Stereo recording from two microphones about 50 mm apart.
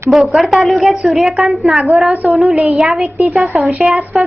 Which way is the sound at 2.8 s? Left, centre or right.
Centre.